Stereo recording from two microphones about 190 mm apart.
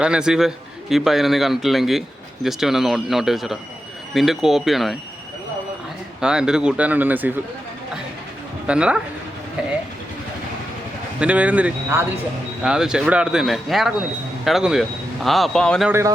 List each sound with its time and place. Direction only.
0.0 s a man's voice: 5° right (ahead or behind)
6.1 s a man's voice: 5° right (ahead or behind)
8.6 s a man's voice: 5° right (ahead or behind)
11.2 s a man's voice: 5° right (ahead or behind)
15.9 s speech: 15° right (ahead or behind)